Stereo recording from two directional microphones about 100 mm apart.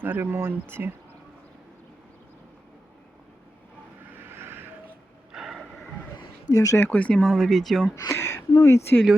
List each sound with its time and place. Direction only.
0.0 s speech: 20° right (ahead or behind)
4.1 s vehicle: 20° right (ahead or behind)
5.3 s a sound: 5° right (ahead or behind)
6.5 s speech: 35° left (ahead or behind)
6.8 s speech: 15° left (ahead or behind)
7.9 s speech: 30° left (ahead or behind)